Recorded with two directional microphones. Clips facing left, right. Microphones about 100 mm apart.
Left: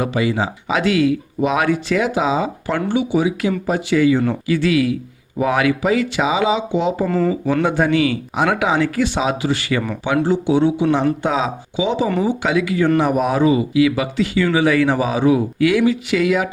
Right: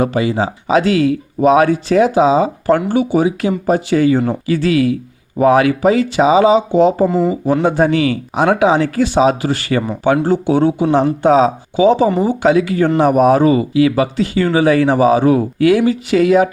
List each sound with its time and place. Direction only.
0.0 s speech: 35° right (ahead or behind)
7.1 s speech: 15° right (ahead or behind)
7.5 s speech: 30° right (ahead or behind)